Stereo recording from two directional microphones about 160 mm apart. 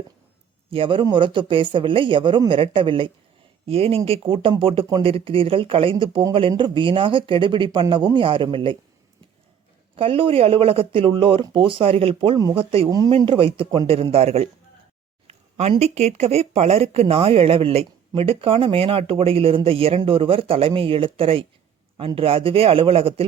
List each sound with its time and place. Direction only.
0.7 s speech: 35° right (ahead or behind)
9.9 s speech: 35° right (ahead or behind)
15.3 s a sound: 40° right (ahead or behind)
15.8 s speech: 45° right (ahead or behind)